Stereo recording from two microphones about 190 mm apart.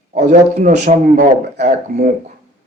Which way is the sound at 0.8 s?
55° right (ahead or behind).